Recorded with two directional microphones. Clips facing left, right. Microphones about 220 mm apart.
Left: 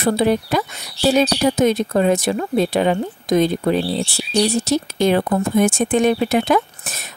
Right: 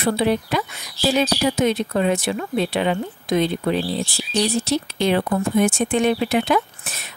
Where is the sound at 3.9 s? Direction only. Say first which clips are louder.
Left 3 dB; 75° left (ahead or behind).